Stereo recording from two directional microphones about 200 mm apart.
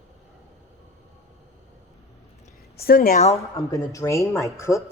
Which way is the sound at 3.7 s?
15° left (ahead or behind).